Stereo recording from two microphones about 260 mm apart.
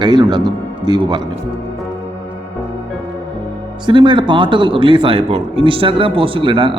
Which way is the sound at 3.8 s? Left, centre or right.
Centre.